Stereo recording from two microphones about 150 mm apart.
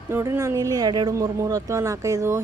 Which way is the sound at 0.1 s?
15° right (ahead or behind).